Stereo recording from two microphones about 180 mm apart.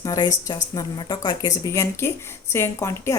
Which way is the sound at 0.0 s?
20° left (ahead or behind).